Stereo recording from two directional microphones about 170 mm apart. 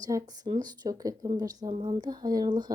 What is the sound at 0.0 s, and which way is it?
Speech, 25° right (ahead or behind).